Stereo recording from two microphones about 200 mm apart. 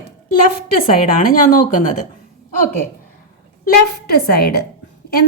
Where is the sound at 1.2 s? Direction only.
40° left (ahead or behind).